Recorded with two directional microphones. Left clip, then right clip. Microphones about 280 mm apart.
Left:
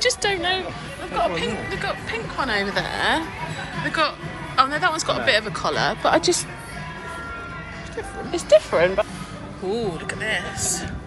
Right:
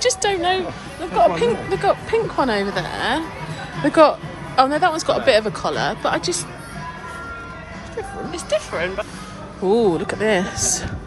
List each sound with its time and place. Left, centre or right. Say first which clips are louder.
0.0 s a woman's voice: right 3 dB; centre
8.3 s speech: left 7 dB; centre
9.7 s a woman's voice: right 9 dB; centre